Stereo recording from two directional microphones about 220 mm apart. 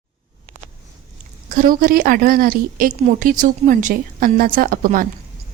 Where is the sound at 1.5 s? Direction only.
35° right (ahead or behind).